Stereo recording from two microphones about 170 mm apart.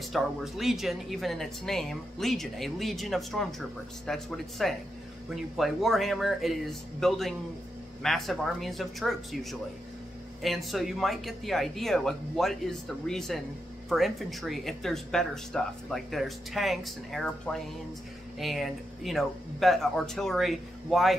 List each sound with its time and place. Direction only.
0.0 s speech: centre (ahead or behind)